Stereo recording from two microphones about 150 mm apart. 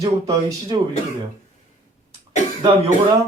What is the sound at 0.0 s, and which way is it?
Speech, 25° right (ahead or behind).